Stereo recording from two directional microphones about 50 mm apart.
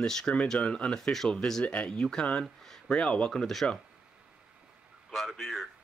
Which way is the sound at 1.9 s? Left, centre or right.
Centre.